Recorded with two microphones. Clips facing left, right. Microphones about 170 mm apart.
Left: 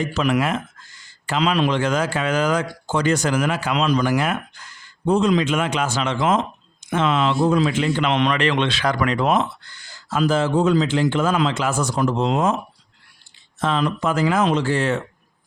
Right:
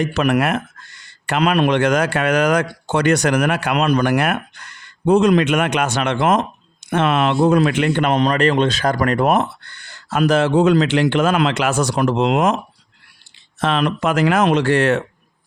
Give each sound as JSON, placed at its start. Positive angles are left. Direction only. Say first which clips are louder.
{"t": 0.0, "sound": "speech", "louder": "right 3 dB", "side_deg": -65}
{"t": 8.1, "sound": "speech", "louder": "right 4 dB", "side_deg": -40}
{"t": 13.6, "sound": "speech", "louder": "right 3 dB", "side_deg": -75}